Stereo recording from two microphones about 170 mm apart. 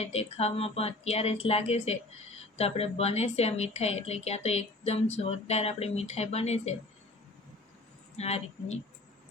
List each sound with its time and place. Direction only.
0.0 s a woman's voice: 35° left (ahead or behind)
8.1 s a woman's voice: 40° left (ahead or behind)